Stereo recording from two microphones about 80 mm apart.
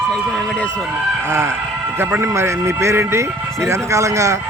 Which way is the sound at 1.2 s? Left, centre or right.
Right.